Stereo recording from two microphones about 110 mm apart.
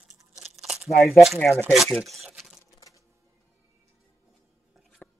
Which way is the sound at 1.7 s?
Centre (ahead or behind).